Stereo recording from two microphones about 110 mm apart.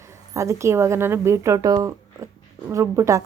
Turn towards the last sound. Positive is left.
turn(degrees=-30)  # may be behind; listen again after turning